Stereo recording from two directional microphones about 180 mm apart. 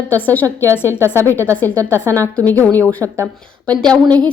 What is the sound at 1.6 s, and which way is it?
Speech, 15° right (ahead or behind).